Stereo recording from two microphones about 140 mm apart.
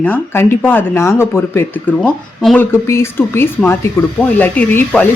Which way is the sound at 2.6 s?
20° left (ahead or behind).